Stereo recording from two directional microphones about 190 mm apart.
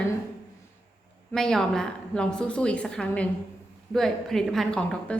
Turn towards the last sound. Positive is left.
turn(degrees=5)  # may be behind; listen again after turning